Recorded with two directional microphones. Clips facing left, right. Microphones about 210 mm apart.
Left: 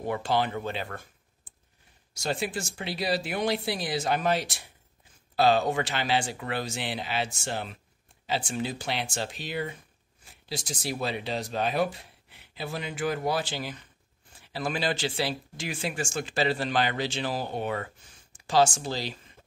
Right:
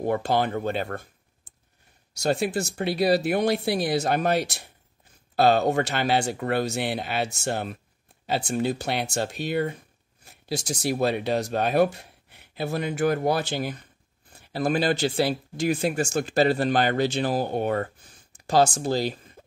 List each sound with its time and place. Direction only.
0.0 s speech: 50° right (ahead or behind)
2.2 s speech: 45° right (ahead or behind)
8.6 s speech: 60° right (ahead or behind)
9.0 s speech: 40° right (ahead or behind)
19.4 s cough: 45° right (ahead or behind)